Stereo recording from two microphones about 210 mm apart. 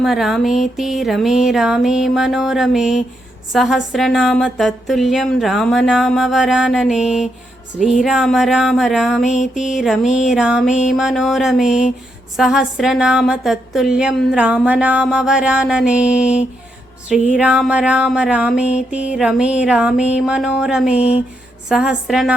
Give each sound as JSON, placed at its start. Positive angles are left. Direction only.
{"t": 0.0, "sound": "a woman's voice", "side_deg": 0}
{"t": 17.3, "sound": "a woman's voice", "side_deg": -5}
{"t": 21.0, "sound": "a sound", "side_deg": 30}
{"t": 21.7, "sound": "a woman's voice", "side_deg": 0}